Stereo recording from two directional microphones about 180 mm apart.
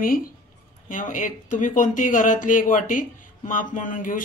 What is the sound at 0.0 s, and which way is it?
Speech, 50° left (ahead or behind).